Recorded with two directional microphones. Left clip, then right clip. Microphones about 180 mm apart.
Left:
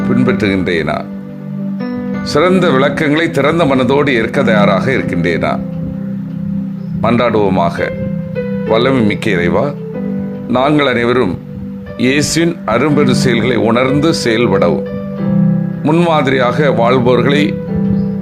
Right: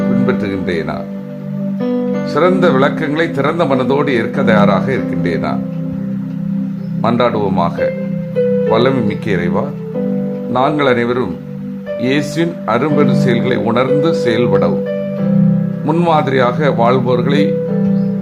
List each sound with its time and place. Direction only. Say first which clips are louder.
0.3 s speech: left 4 dB; 25° left (ahead or behind)
2.3 s speech: left 2 dB; 25° left (ahead or behind)
7.0 s speech: left 2 dB; 25° left (ahead or behind)
15.8 s speech: left 4 dB; 15° left (ahead or behind)
16.0 s speech: right 1 dB; 30° left (ahead or behind)